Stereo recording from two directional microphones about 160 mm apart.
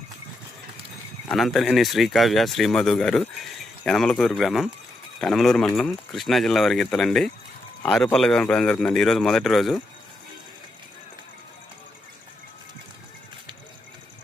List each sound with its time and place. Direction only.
1.3 s speech: centre (ahead or behind)